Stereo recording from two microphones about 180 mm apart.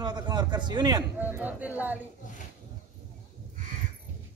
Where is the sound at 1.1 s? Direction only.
10° right (ahead or behind).